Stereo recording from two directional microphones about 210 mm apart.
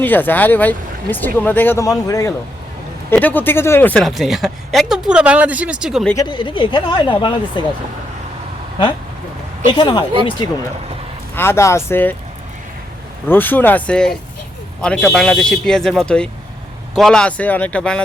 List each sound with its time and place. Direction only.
0.0 s speech: 10° left (ahead or behind)
6.1 s speech: 20° left (ahead or behind)
9.7 s speech: 20° left (ahead or behind)
11.3 s speech: 10° left (ahead or behind)
13.2 s speech: 10° left (ahead or behind)